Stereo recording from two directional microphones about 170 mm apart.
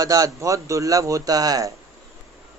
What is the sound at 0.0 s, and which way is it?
A man's voice, 20° right (ahead or behind).